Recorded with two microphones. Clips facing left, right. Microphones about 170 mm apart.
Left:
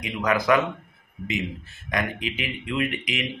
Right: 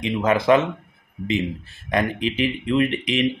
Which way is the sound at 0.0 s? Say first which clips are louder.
Right 4 dB; 25° right (ahead or behind).